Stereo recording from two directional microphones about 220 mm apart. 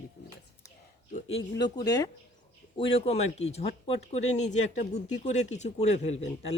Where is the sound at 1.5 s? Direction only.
20° left (ahead or behind).